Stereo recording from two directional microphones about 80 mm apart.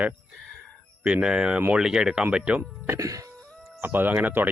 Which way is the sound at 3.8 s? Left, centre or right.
Right.